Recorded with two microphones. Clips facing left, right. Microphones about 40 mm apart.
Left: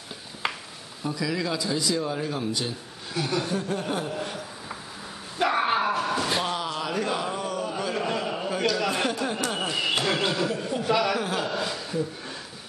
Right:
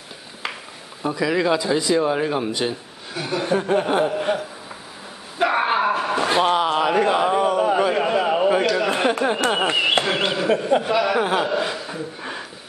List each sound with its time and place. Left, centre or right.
0.4 s a sound: centre
1.1 s speech: right
3.2 s speech: centre
3.4 s speech: right
5.4 s a sound: centre
9.3 s speech: right
10.9 s speech: centre
11.2 s speech: right
11.5 s a sound: right